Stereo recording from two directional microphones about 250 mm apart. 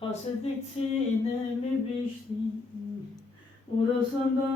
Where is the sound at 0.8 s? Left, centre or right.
Left.